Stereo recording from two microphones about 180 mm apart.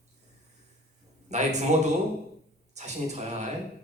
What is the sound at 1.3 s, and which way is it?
A man's voice, 40° right (ahead or behind).